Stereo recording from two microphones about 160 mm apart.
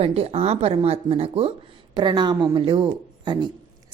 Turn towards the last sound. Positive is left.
turn(degrees=-25)  # may be behind; listen again after turning